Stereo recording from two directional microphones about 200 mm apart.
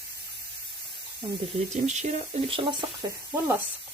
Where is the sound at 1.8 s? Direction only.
35° right (ahead or behind).